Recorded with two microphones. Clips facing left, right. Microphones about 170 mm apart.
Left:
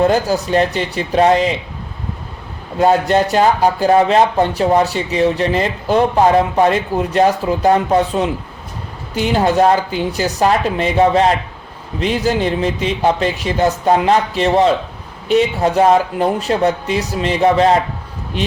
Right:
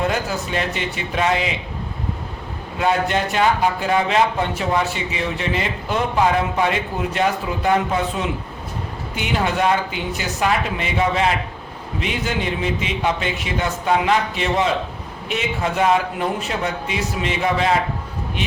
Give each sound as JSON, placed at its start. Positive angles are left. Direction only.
{"t": 0.0, "sound": "speech", "side_deg": 35}
{"t": 2.7, "sound": "speech", "side_deg": 35}